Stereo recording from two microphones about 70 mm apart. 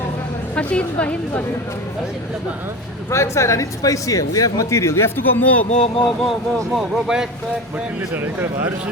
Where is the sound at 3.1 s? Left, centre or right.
Left.